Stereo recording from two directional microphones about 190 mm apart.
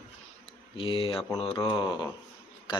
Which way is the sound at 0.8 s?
25° left (ahead or behind).